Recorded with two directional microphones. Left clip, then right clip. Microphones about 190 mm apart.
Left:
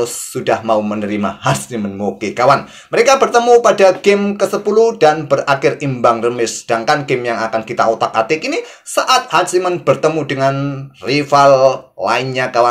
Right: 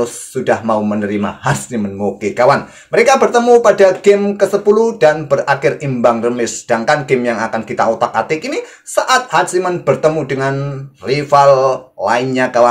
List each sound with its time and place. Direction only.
0.0 s speech: 30° left (ahead or behind)